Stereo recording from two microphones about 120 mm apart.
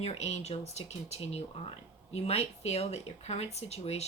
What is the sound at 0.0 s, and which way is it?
Speech, 65° left (ahead or behind).